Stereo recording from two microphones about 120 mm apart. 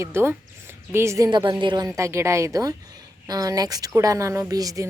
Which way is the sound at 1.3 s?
40° right (ahead or behind).